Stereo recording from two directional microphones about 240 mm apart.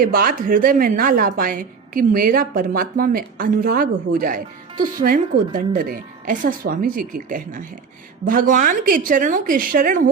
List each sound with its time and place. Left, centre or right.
0.0 s a woman's voice: right